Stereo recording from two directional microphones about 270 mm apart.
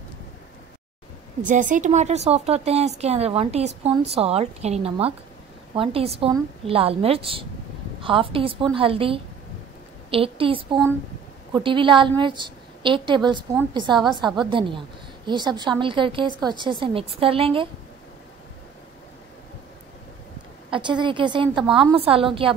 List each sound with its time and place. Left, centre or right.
1.5 s a woman's voice: right
13.9 s a woman's voice: centre
14.4 s a woman's voice: centre
20.7 s a woman's voice: centre